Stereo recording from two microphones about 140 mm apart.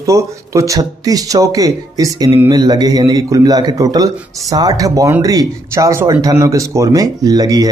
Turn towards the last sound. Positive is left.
turn(degrees=-25)  # may be behind; listen again after turning